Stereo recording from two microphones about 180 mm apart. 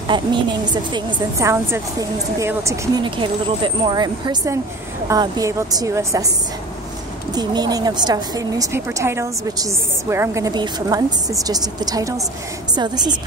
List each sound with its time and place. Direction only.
0.1 s a woman's voice: 25° right (ahead or behind)
3.0 s a woman's voice: 30° right (ahead or behind)
7.3 s a woman's voice: 20° right (ahead or behind)